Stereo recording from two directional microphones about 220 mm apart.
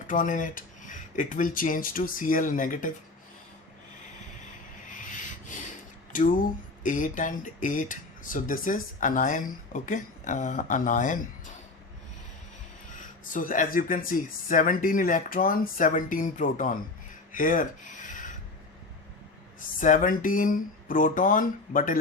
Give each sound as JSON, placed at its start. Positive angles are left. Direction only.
{"t": 0.1, "sound": "speech", "side_deg": 35}
{"t": 4.9, "sound": "rub", "side_deg": 35}
{"t": 6.1, "sound": "speech", "side_deg": 40}
{"t": 13.3, "sound": "speech", "side_deg": 40}
{"t": 17.3, "sound": "rub", "side_deg": 35}
{"t": 19.8, "sound": "speech", "side_deg": 35}